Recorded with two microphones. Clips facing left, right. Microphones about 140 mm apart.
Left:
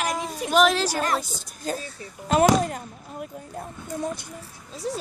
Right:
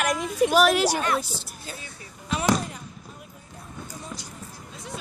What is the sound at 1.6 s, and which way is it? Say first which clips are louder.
Speech: left 10 dB; 40° left (ahead or behind).